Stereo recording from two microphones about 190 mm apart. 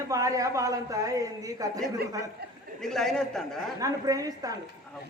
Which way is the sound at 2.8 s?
Centre (ahead or behind).